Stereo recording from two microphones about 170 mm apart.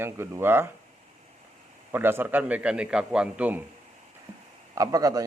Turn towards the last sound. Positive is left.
turn(degrees=-20)  # may be behind; listen again after turning